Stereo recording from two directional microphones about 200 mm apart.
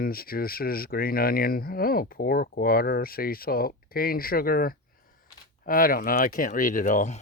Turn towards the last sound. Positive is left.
turn(degrees=40)  # may be behind; listen again after turning